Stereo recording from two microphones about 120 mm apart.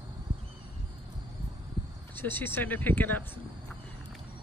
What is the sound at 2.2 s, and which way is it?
Speech, 15° left (ahead or behind).